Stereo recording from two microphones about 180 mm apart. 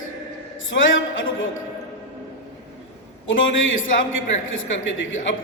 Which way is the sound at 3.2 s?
90° left.